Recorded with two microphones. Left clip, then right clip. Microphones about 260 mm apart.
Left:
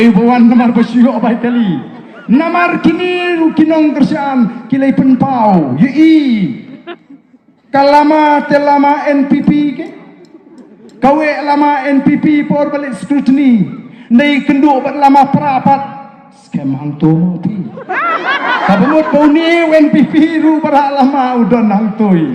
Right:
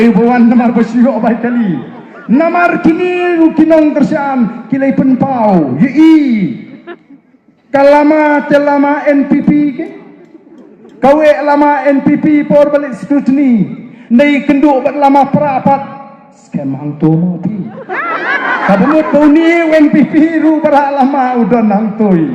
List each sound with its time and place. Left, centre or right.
0.0 s a man's voice: left
7.9 s a man's voice: left
11.0 s a man's voice: left
17.8 s speech: left
18.3 s a man's voice: left